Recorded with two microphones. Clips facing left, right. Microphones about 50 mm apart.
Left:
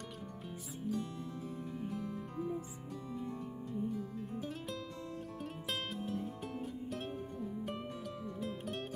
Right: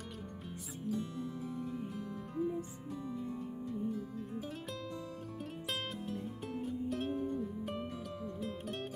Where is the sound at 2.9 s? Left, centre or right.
Centre.